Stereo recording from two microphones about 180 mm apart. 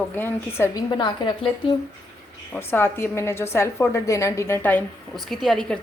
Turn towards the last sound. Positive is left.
turn(degrees=0)  # may be behind; listen again after turning